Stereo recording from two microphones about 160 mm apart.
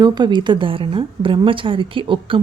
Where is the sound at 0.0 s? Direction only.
25° right (ahead or behind).